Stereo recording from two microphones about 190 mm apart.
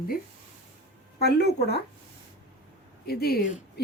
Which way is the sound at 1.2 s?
60° left (ahead or behind).